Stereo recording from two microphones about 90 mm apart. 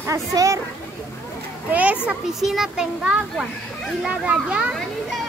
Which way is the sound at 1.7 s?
15° right (ahead or behind).